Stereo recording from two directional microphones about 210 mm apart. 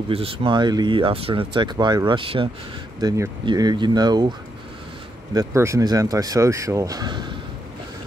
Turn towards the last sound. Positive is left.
turn(degrees=-20)  # may be behind; listen again after turning